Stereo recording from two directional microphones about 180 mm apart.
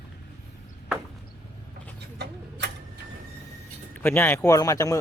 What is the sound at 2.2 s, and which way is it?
Vehicle, 65° right (ahead or behind).